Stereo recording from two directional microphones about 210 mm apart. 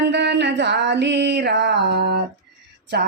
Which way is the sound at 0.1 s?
55° right (ahead or behind).